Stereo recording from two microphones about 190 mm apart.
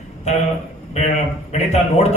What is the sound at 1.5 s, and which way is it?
Speech, 35° left (ahead or behind).